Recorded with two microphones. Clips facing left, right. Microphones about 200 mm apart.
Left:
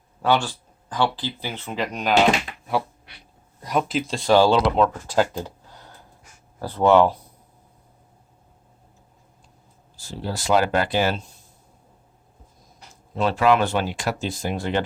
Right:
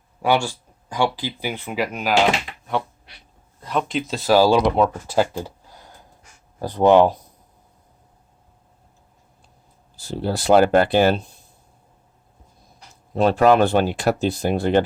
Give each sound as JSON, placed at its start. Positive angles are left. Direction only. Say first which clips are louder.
{"t": 0.2, "sound": "speech", "louder": "right 1 dB", "side_deg": -10}
{"t": 3.6, "sound": "speech", "louder": "even", "side_deg": 10}
{"t": 10.0, "sound": "speech", "louder": "right 6 dB", "side_deg": -60}
{"t": 13.1, "sound": "speech", "louder": "right 4 dB", "side_deg": -40}
{"t": 14.6, "sound": "speech", "louder": "right 7 dB", "side_deg": -45}